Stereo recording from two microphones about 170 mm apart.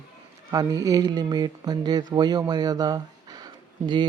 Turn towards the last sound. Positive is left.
turn(degrees=-25)  # may be behind; listen again after turning